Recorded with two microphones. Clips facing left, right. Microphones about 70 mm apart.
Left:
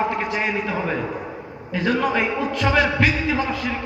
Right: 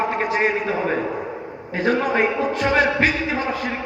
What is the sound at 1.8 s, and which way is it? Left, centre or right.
A man's voice, right.